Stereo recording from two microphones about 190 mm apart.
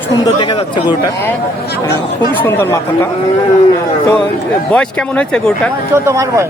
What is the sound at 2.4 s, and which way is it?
Speech, 10° left (ahead or behind).